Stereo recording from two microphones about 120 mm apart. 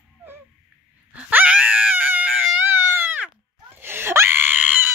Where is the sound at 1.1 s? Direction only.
15° right (ahead or behind).